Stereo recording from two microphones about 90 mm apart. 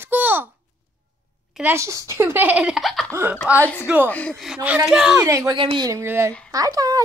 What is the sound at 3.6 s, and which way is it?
Speech, 20° left (ahead or behind).